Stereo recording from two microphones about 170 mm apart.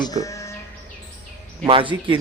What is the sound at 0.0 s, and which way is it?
Sheep, 20° left (ahead or behind).